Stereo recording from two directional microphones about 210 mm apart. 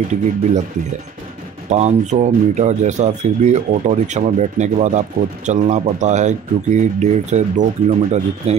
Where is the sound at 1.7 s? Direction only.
30° right (ahead or behind).